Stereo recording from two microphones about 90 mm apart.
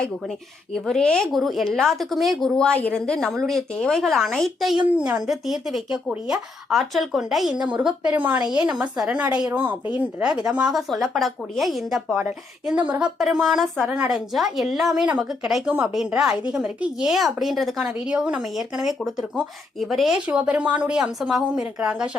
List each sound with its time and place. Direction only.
0.7 s speech: 5° left (ahead or behind)
2.6 s speech: 15° left (ahead or behind)
4.9 s speech: 10° right (ahead or behind)
7.8 s a woman's voice: 15° right (ahead or behind)
9.5 s speech: 25° right (ahead or behind)
9.9 s speech: 10° right (ahead or behind)
12.6 s a woman's voice: 15° right (ahead or behind)
15.6 s speech: 20° right (ahead or behind)
16.0 s a woman's voice: 10° right (ahead or behind)
20.2 s a woman's voice: 15° right (ahead or behind)